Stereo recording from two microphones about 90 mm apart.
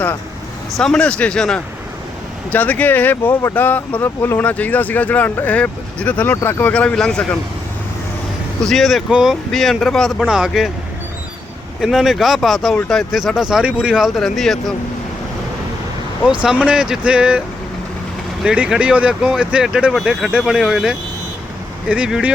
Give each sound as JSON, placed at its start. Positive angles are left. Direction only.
{"t": 0.8, "sound": "speech", "side_deg": 10}
{"t": 8.6, "sound": "speech", "side_deg": 0}
{"t": 10.2, "sound": "speech", "side_deg": -10}
{"t": 11.8, "sound": "speech", "side_deg": 0}
{"t": 14.2, "sound": "speech", "side_deg": 5}
{"t": 16.2, "sound": "speech", "side_deg": -10}
{"t": 18.4, "sound": "speech", "side_deg": -10}